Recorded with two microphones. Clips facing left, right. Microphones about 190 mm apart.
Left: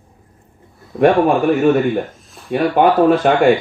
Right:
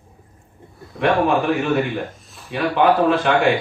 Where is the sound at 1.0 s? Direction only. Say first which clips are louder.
Left 5 dB; 45° left (ahead or behind).